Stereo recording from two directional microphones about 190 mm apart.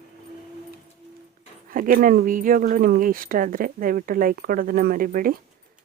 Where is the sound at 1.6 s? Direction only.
45° right (ahead or behind).